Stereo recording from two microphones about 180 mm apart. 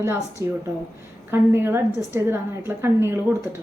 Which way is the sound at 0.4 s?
15° right (ahead or behind).